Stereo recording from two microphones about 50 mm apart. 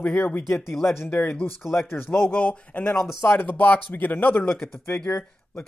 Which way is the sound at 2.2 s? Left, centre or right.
Left.